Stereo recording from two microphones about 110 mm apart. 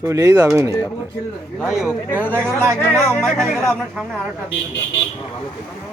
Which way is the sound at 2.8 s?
10° left (ahead or behind).